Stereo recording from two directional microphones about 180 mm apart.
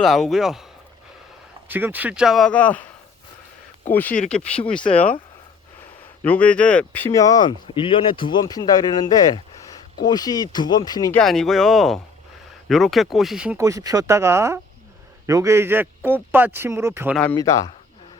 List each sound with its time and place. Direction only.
0.0 s speech: centre (ahead or behind)
1.6 s speech: 10° right (ahead or behind); by 2.8 s 10° left (ahead or behind)
4.1 s speech: 40° left (ahead or behind)
4.8 s speech: 30° left (ahead or behind)
6.2 s speech: 10° left (ahead or behind)
11.1 s speech: 5° left (ahead or behind)
13.6 s a man's voice: 20° right (ahead or behind)